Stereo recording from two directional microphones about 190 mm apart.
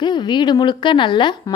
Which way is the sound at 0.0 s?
20° left (ahead or behind).